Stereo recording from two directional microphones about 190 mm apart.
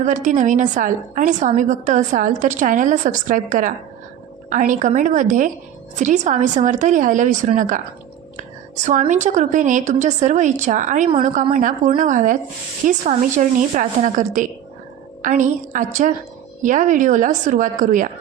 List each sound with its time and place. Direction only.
0.0 s a woman's voice: 40° right (ahead or behind)